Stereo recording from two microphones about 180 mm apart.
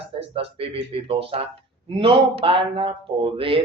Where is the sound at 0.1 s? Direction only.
30° right (ahead or behind).